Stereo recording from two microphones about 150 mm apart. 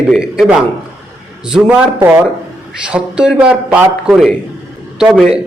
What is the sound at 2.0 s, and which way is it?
A man's voice, 15° right (ahead or behind).